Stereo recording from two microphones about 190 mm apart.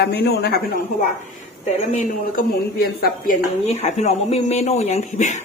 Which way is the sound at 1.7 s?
35° left (ahead or behind).